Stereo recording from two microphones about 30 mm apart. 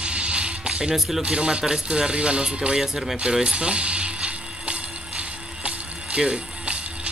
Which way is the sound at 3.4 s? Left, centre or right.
Right.